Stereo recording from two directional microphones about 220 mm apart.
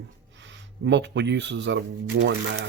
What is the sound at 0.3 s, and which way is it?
Speech, 55° right (ahead or behind).